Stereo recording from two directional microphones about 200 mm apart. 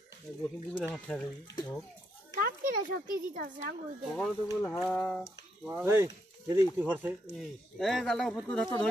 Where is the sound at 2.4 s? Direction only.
45° right (ahead or behind).